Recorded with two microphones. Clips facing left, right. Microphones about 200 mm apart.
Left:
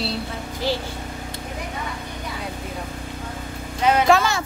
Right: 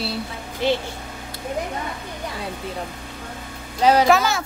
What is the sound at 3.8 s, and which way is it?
Speech, 35° right (ahead or behind).